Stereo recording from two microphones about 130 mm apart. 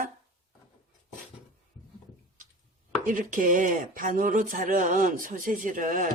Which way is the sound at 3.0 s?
85° right.